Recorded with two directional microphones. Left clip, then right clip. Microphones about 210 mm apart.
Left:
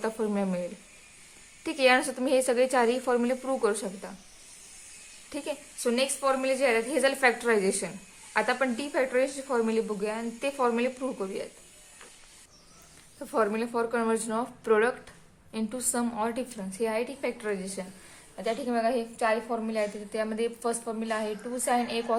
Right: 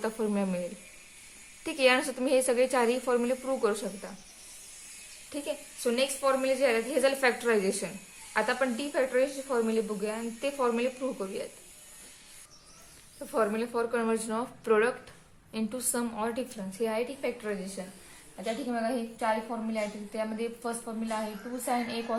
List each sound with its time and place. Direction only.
0.0 s a woman's voice: 10° left (ahead or behind)
1.6 s a woman's voice: 15° left (ahead or behind)
5.3 s a woman's voice: 25° left (ahead or behind)
13.1 s a woman's voice: 25° left (ahead or behind)
18.4 s a woman's voice: 45° left (ahead or behind)